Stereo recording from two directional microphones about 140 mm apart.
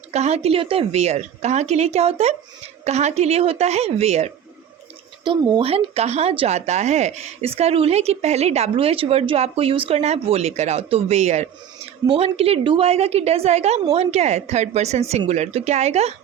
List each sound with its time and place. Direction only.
0.1 s speech: 50° right (ahead or behind)
5.2 s speech: 35° right (ahead or behind); by 11.4 s 55° right (ahead or behind)
12.0 s speech: 45° right (ahead or behind)